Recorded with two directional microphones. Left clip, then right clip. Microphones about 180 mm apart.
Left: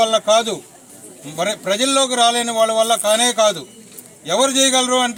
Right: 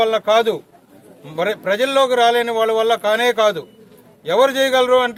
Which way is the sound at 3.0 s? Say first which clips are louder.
Even; 25° right (ahead or behind).